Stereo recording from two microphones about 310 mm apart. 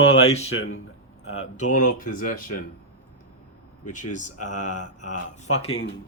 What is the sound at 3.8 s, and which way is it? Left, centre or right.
Speech, left.